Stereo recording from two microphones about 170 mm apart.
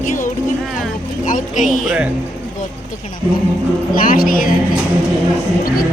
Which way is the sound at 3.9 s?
55° left (ahead or behind).